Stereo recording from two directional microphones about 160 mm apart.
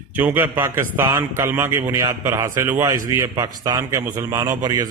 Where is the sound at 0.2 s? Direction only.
15° right (ahead or behind).